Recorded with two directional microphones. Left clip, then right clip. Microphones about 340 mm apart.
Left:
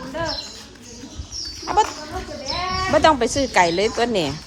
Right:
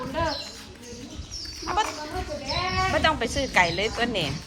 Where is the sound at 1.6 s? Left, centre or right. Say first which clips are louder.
Left 7 dB; centre.